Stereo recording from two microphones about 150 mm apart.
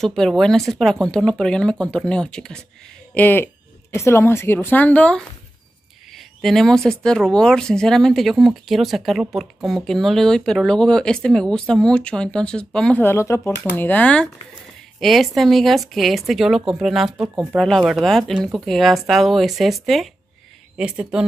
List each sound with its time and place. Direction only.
0.0 s a woman's voice: centre (ahead or behind)
13.0 s a woman's voice: 15° left (ahead or behind); by 21.3 s 5° right (ahead or behind)